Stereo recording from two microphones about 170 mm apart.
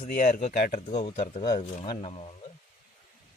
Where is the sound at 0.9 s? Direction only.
35° left (ahead or behind).